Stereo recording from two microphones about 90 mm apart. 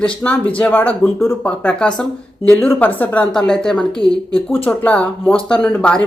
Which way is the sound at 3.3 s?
5° left (ahead or behind).